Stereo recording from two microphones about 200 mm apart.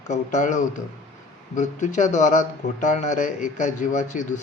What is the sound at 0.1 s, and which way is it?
Speech, 40° left (ahead or behind).